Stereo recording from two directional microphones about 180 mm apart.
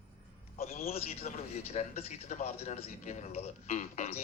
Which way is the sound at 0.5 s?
35° left (ahead or behind).